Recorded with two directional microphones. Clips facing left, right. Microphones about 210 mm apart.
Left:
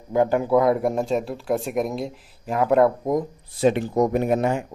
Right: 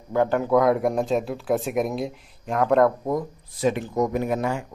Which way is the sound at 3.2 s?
30° left (ahead or behind).